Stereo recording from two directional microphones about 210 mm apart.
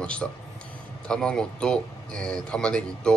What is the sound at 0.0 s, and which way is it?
Speech, 5° left (ahead or behind).